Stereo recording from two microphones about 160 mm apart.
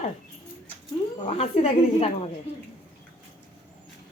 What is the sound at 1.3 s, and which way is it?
A woman's voice, 40° left (ahead or behind).